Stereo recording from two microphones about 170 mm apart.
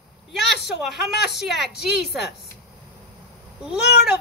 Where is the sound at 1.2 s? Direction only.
Centre (ahead or behind).